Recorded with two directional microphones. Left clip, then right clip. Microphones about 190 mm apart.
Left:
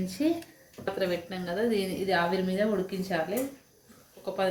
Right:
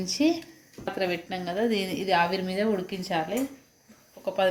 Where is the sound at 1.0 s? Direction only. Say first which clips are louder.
Right 2 dB; 40° right (ahead or behind).